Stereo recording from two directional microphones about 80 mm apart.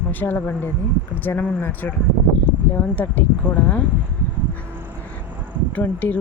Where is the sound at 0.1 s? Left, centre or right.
Left.